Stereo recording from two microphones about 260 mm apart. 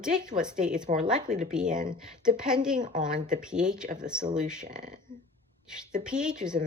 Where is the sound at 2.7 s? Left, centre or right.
Right.